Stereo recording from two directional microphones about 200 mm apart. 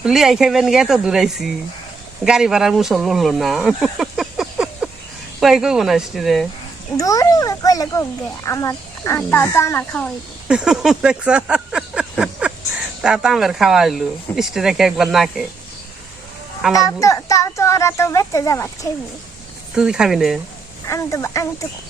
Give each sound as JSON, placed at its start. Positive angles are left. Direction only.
{"t": 0.0, "sound": "speech", "side_deg": 0}
{"t": 6.9, "sound": "a child's voice", "side_deg": 15}
{"t": 10.5, "sound": "a sound", "side_deg": -5}
{"t": 13.0, "sound": "speech", "side_deg": -5}
{"t": 16.7, "sound": "a child's voice", "side_deg": 15}
{"t": 19.7, "sound": "speech", "side_deg": -5}
{"t": 20.8, "sound": "a child's voice", "side_deg": 15}